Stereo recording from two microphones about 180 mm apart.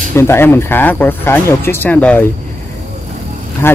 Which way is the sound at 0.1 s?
15° left (ahead or behind).